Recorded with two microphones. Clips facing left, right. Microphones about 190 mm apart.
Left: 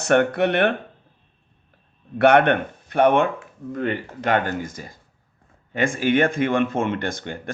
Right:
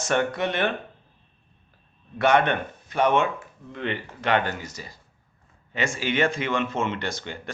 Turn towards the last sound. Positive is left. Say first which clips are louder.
# left 4 dB
turn(degrees=55)  # may be behind; listen again after turning